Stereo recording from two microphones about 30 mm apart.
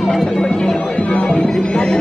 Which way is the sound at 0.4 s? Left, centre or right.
Left.